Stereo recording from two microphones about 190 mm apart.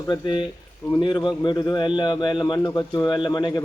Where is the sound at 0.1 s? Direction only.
25° left (ahead or behind).